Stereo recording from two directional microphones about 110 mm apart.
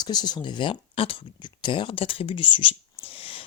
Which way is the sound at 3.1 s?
60° left (ahead or behind).